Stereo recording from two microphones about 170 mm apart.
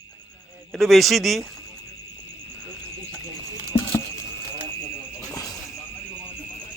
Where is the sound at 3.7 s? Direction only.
35° left (ahead or behind).